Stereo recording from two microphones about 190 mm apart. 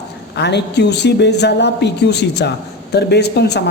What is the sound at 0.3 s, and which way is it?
Speech, 65° left (ahead or behind).